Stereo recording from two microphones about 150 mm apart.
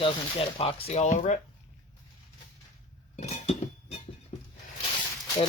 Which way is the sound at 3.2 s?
45° left (ahead or behind).